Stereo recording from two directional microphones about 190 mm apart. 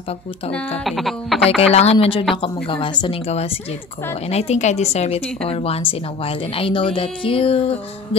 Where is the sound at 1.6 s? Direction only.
35° left (ahead or behind).